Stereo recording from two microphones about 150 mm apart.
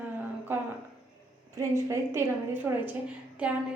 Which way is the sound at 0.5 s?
15° right (ahead or behind).